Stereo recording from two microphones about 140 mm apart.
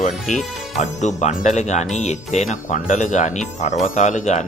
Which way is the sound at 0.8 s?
55° left (ahead or behind).